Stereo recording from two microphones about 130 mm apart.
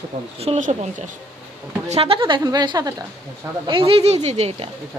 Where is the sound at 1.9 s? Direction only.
45° right (ahead or behind); by 2.9 s 30° right (ahead or behind).